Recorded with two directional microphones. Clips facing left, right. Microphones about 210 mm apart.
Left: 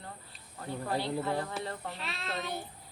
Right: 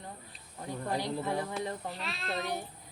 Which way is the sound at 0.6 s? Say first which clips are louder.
Even; 15° right (ahead or behind).